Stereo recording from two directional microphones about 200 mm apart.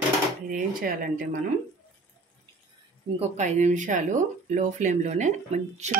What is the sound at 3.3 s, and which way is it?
Speech, 35° right (ahead or behind).